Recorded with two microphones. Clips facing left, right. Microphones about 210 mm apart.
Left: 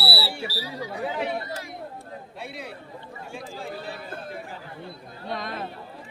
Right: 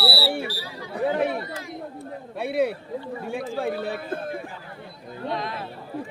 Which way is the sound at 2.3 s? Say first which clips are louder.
Right 16 dB; 60° right (ahead or behind).